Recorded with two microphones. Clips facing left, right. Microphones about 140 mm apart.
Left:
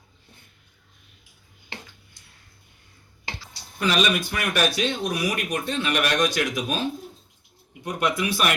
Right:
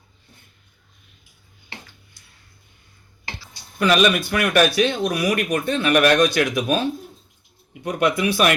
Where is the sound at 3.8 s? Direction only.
60° right (ahead or behind).